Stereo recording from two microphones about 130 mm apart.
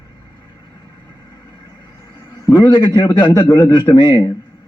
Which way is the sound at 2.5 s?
30° left (ahead or behind).